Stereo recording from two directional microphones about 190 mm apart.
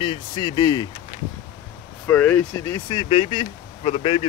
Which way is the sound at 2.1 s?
10° left (ahead or behind).